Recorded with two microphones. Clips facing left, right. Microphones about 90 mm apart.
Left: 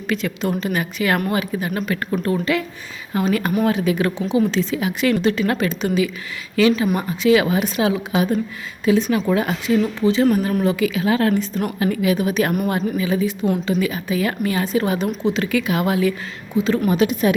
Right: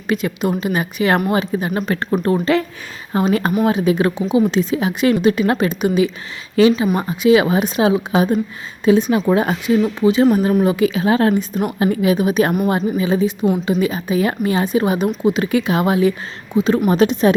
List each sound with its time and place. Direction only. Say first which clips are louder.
0.1 s a woman's voice: right 3 dB; 20° right (ahead or behind)
3.6 s a woman's voice: right 3 dB; 20° right (ahead or behind)
9.8 s a woman's voice: right 4 dB; 15° right (ahead or behind)
16.9 s speech: right 4 dB; 30° right (ahead or behind)